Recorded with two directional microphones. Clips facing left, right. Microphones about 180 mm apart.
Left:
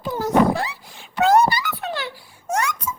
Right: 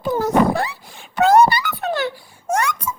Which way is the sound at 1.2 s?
65° right (ahead or behind).